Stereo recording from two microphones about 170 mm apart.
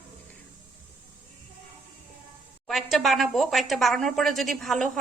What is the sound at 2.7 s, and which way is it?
A woman's voice, centre (ahead or behind).